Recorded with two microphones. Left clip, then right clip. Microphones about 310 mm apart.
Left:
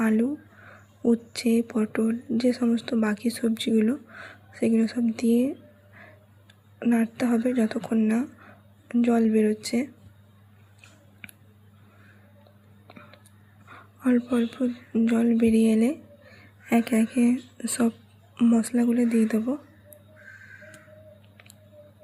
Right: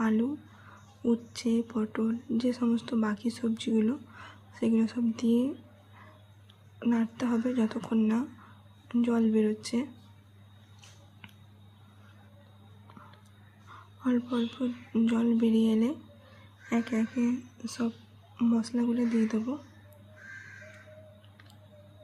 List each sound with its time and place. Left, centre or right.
0.0 s speech: centre
6.7 s speech: centre
14.0 s speech: centre